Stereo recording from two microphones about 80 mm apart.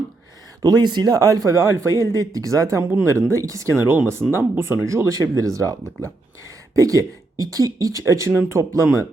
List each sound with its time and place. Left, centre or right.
0.6 s speech: right
3.8 s speech: right